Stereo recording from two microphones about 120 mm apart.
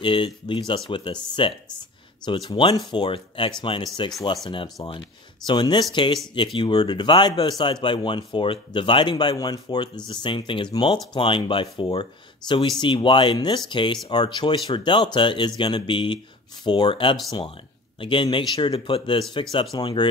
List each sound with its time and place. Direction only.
0.0 s speech: 45° left (ahead or behind)
5.5 s speech: 40° left (ahead or behind)